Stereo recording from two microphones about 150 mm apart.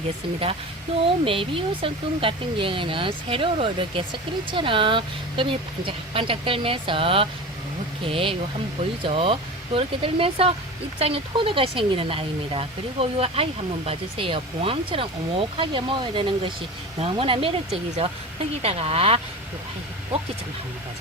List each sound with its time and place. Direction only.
1.0 s speech: 35° right (ahead or behind)
18.6 s speech: 40° right (ahead or behind)